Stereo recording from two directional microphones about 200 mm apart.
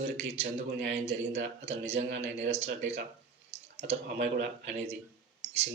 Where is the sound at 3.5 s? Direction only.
30° right (ahead or behind).